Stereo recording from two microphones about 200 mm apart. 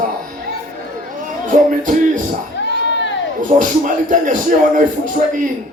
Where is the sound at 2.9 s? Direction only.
65° left (ahead or behind).